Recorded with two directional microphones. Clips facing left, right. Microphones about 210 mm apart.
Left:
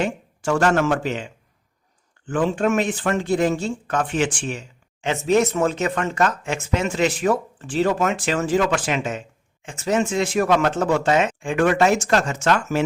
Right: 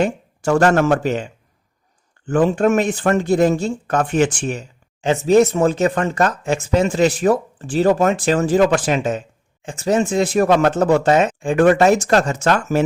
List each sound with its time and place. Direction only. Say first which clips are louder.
0.0 s speech: right 5 dB; 40° right (ahead or behind)